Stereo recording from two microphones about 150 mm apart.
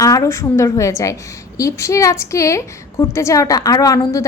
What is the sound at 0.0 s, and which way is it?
A woman's voice, 20° left (ahead or behind).